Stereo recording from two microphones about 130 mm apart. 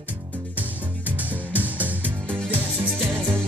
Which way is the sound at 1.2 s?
10° right (ahead or behind).